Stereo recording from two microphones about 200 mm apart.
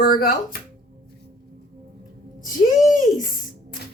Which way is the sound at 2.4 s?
40° left (ahead or behind).